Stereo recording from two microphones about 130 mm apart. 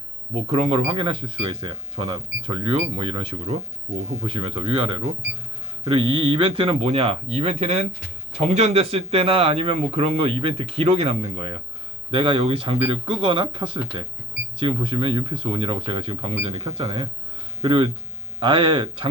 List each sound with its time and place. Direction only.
0.3 s a man's voice: 50° right (ahead or behind)